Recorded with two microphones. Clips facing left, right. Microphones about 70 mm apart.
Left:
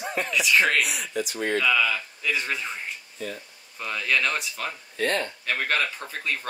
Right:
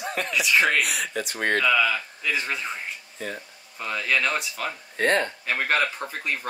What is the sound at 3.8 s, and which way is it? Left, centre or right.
Speech, centre.